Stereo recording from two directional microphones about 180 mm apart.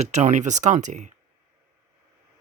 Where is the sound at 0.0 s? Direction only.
40° right (ahead or behind).